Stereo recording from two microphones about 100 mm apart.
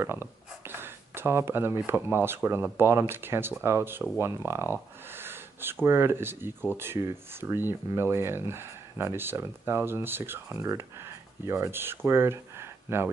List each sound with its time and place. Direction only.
0.0 s a sound: 20° right (ahead or behind)
1.9 s speech: 25° right (ahead or behind)
5.1 s snort: 20° right (ahead or behind)
5.9 s speech: 25° right (ahead or behind)